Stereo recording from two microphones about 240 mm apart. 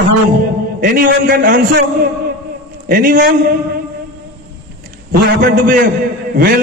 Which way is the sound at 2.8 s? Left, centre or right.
Right.